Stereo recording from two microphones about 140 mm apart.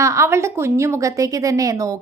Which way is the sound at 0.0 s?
20° right (ahead or behind).